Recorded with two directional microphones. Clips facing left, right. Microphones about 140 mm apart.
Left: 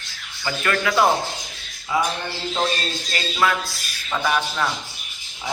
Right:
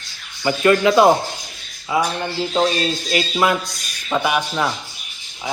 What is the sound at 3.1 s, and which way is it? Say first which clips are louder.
Speech: right 3 dB; 15° right (ahead or behind).